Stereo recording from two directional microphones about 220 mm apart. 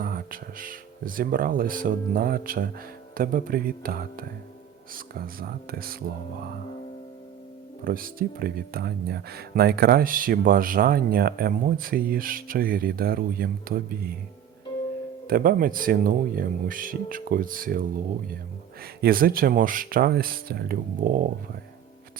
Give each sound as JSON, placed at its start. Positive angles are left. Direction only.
{"t": 0.0, "sound": "speech", "side_deg": -40}
{"t": 7.9, "sound": "speech", "side_deg": -40}
{"t": 15.3, "sound": "speech", "side_deg": -40}
{"t": 19.0, "sound": "speech", "side_deg": -40}